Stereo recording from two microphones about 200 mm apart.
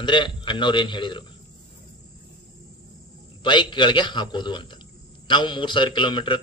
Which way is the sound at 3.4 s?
25° left (ahead or behind).